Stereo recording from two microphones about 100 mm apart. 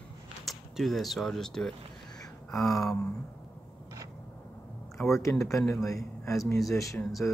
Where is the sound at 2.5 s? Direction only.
Centre (ahead or behind).